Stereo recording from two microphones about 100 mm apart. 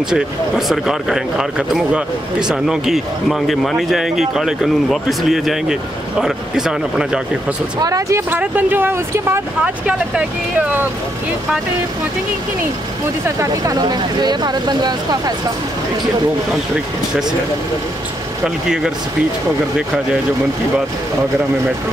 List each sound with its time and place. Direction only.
0.1 s speech: 5° right (ahead or behind)
7.8 s speech: 40° right (ahead or behind)
8.3 s speech: 15° right (ahead or behind)
13.4 s speech: 35° right (ahead or behind)